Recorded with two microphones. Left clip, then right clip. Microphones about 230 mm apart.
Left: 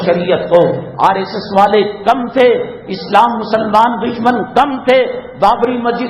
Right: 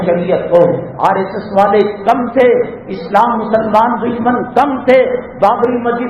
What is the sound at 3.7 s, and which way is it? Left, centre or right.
A man's voice, left.